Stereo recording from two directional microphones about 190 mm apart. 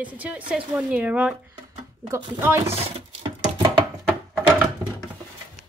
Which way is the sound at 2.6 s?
30° right (ahead or behind).